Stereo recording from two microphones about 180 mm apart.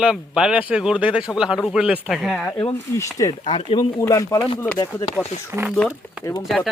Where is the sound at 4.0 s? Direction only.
20° left (ahead or behind).